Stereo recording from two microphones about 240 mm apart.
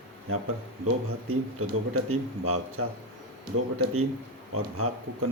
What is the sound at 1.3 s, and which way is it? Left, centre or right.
Speech, right.